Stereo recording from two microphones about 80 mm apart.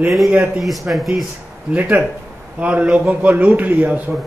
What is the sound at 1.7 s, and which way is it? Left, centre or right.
A man's voice, centre.